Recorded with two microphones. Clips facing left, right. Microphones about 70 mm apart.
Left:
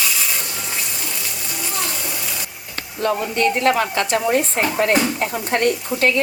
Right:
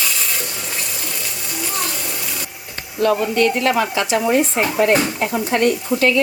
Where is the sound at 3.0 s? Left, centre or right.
Left.